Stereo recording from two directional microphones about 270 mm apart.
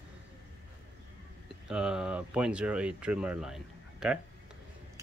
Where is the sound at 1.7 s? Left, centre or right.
Centre.